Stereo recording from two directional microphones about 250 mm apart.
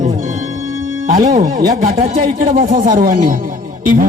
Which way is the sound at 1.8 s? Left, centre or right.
Right.